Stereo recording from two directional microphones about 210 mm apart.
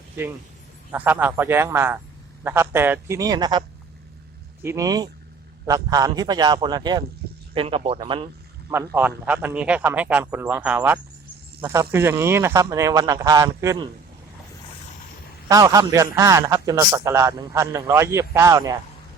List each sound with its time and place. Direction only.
0.9 s a man's voice: 10° right (ahead or behind)
4.6 s a man's voice: 15° right (ahead or behind)
8.7 s a man's voice: 10° right (ahead or behind)
15.4 s a man's voice: 15° right (ahead or behind)